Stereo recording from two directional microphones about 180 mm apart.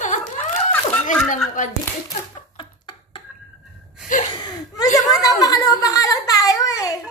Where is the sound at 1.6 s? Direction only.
45° left (ahead or behind).